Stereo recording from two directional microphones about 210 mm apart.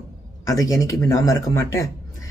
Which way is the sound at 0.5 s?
15° left (ahead or behind).